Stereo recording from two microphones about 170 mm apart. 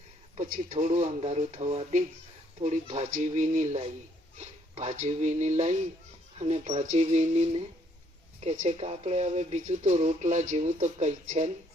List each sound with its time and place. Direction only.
0.3 s speech: 45° right (ahead or behind)